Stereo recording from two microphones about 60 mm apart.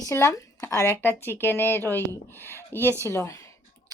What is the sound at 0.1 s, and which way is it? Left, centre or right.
Speech, left.